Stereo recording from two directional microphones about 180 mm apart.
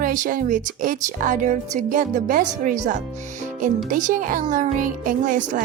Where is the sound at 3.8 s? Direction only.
45° right (ahead or behind).